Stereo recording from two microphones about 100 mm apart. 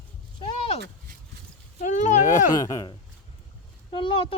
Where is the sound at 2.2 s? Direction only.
35° left (ahead or behind).